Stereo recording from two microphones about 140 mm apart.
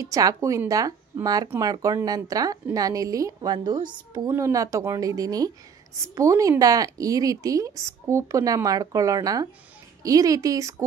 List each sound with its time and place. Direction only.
0.0 s speech: 25° right (ahead or behind)
4.3 s speech: 20° right (ahead or behind)